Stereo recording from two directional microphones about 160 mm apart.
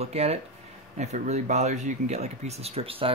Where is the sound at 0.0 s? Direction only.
40° right (ahead or behind).